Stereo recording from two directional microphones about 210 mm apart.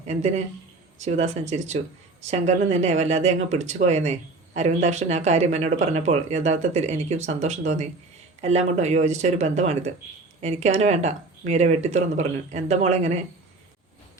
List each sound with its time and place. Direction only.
0.1 s speech: 30° right (ahead or behind)